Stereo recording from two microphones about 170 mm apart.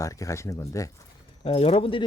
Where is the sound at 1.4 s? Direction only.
35° left (ahead or behind).